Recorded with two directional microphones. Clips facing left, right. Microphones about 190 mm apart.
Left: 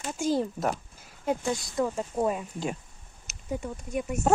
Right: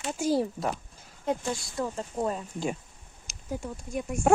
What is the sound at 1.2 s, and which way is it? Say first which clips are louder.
Speech: left 2 dB; 15° left (ahead or behind).